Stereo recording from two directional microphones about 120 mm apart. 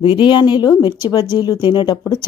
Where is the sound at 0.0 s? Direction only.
40° left (ahead or behind).